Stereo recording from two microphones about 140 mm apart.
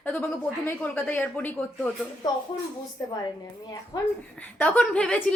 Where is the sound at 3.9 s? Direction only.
30° left (ahead or behind).